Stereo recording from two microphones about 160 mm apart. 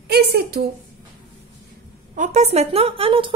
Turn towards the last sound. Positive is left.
turn(degrees=-35)  # may be behind; listen again after turning